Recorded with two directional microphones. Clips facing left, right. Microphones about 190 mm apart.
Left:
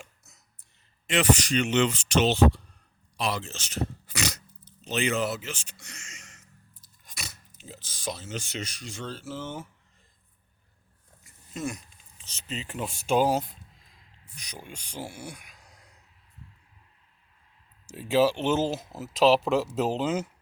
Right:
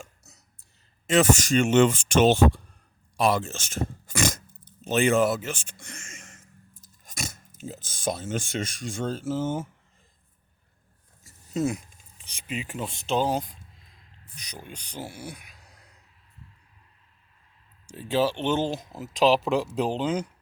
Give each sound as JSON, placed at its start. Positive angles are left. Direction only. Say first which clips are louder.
{"t": 1.1, "sound": "speech", "louder": "right 3 dB", "side_deg": -45}
{"t": 12.2, "sound": "speech", "louder": "right 3 dB", "side_deg": -10}
{"t": 12.7, "sound": "speech", "louder": "left 2 dB", "side_deg": 5}
{"t": 15.1, "sound": "speech", "louder": "right 1 dB", "side_deg": 50}
{"t": 15.5, "sound": "a sound", "louder": "even", "side_deg": -5}
{"t": 17.8, "sound": "speech", "louder": "left 2 dB", "side_deg": 10}